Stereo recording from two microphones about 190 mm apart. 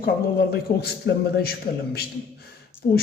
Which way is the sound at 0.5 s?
60° left (ahead or behind).